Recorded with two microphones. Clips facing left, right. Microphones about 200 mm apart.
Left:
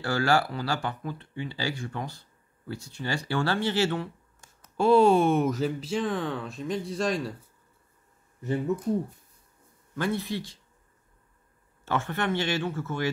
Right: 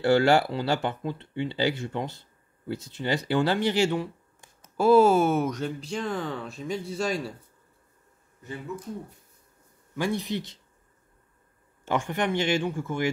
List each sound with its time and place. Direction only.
0.0 s speech: 25° right (ahead or behind); by 7.3 s centre (ahead or behind)
9.9 s speech: 15° right (ahead or behind)
11.8 s speech: 15° right (ahead or behind)